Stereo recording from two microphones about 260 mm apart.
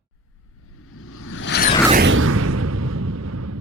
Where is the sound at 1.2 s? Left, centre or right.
Left.